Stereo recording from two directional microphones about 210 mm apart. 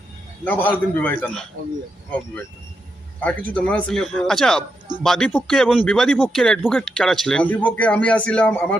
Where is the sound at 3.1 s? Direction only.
5° left (ahead or behind).